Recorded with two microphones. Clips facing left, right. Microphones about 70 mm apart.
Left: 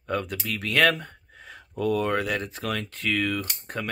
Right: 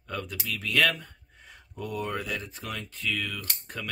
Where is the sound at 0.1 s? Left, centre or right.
Left.